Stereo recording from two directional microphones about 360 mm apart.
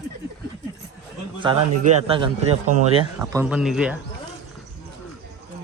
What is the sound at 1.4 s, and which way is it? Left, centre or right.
A man's voice, centre.